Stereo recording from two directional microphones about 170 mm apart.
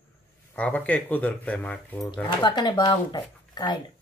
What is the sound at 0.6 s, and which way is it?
Speech, 10° left (ahead or behind).